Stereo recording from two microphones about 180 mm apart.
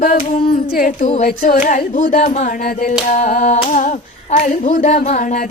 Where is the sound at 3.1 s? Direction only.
45° left (ahead or behind).